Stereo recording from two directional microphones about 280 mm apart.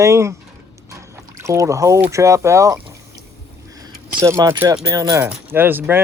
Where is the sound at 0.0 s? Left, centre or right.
Centre.